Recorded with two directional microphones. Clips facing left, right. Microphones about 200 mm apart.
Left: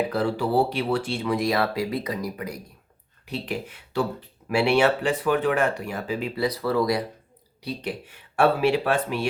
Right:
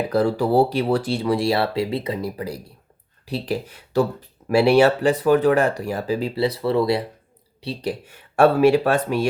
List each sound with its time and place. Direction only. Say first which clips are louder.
0.1 s speech: right 5 dB; 40° right (ahead or behind)
8.4 s speech: right 6 dB; 45° right (ahead or behind)